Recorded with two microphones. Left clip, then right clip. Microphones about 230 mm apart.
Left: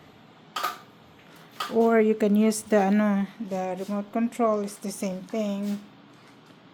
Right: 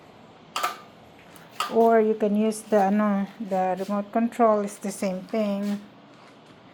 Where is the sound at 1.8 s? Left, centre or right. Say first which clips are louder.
Right 1 dB; left.